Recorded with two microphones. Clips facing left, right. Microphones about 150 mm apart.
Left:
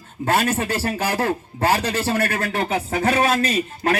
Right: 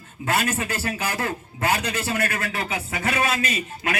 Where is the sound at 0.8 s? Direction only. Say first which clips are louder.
Left 5 dB; 35° left (ahead or behind).